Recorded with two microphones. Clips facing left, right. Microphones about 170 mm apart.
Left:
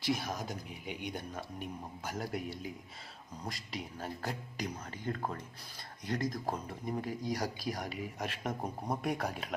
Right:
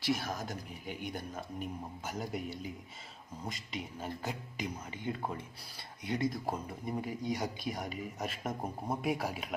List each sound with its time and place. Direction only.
0.0 s speech: centre (ahead or behind)